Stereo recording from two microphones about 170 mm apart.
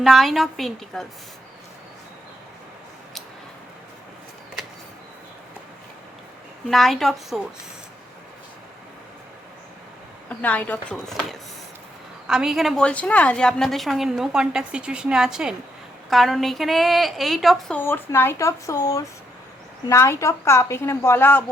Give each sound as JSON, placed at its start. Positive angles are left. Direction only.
{"t": 0.0, "sound": "a woman's voice", "side_deg": 0}
{"t": 6.7, "sound": "a woman's voice", "side_deg": 0}
{"t": 10.2, "sound": "a woman's voice", "side_deg": 10}
{"t": 17.7, "sound": "a woman's voice", "side_deg": 10}